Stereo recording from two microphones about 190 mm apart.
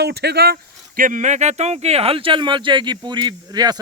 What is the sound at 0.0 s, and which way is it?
Speech, 60° right (ahead or behind).